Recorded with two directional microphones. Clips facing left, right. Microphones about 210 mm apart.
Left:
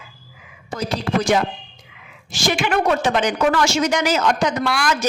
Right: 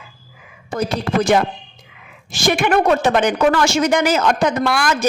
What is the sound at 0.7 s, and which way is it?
A woman's voice, 55° right (ahead or behind).